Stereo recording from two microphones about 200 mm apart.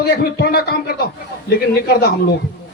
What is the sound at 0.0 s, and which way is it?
A man's voice, 50° left (ahead or behind).